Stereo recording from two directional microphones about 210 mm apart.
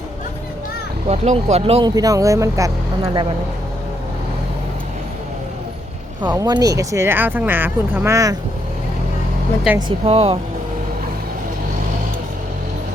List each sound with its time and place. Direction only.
1.0 s speech: 30° right (ahead or behind); by 3.2 s 15° right (ahead or behind)
6.2 s speech: 15° right (ahead or behind)
9.7 s speech: 5° right (ahead or behind)
10.1 s speech: 25° right (ahead or behind)